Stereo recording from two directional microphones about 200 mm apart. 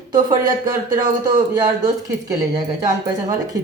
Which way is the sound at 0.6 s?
20° right (ahead or behind).